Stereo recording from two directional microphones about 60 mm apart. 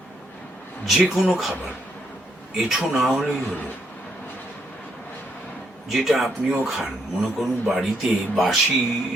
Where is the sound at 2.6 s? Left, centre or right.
Centre.